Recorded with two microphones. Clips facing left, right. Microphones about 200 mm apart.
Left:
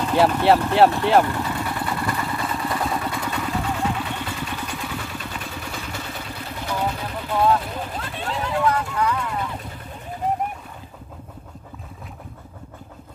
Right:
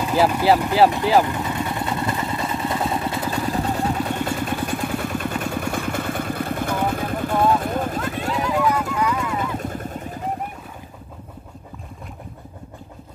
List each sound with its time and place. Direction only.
0.0 s speech: 5° right (ahead or behind)
1.2 s vehicle: 20° right (ahead or behind); by 8.5 s 45° right (ahead or behind)
8.6 s vehicle: 10° right (ahead or behind)
9.4 s vehicle: 45° right (ahead or behind)